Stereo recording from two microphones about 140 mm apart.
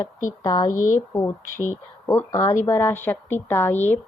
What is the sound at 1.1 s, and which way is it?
A woman's voice, 25° left (ahead or behind).